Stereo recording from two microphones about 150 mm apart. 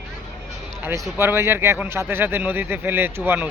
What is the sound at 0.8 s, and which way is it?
Speech, 15° right (ahead or behind).